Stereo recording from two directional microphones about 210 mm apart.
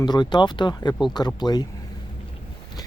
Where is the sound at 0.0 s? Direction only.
20° left (ahead or behind).